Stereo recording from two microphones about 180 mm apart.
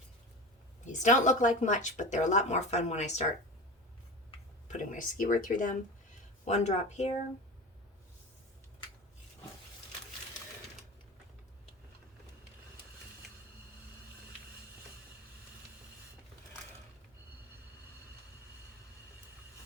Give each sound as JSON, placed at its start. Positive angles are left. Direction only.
{"t": 0.9, "sound": "speech", "side_deg": 45}
{"t": 4.7, "sound": "speech", "side_deg": 45}